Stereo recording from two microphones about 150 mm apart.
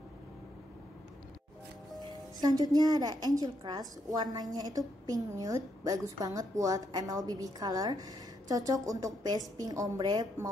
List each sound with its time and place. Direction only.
2.0 s a woman's voice: 25° right (ahead or behind)